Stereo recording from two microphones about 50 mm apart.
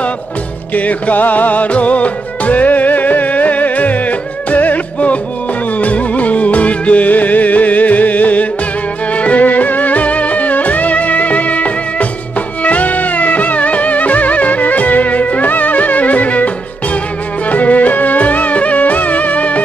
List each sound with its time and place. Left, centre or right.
0.7 s music: left